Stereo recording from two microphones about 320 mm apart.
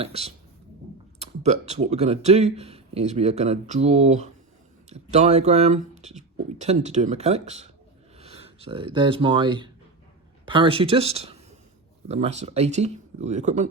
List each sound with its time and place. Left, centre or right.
0.0 s speech: centre